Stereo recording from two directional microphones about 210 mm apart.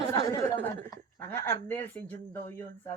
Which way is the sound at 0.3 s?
15° left (ahead or behind).